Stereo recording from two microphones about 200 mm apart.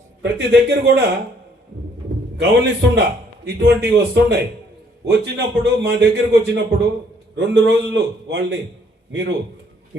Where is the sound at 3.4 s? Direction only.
55° right (ahead or behind).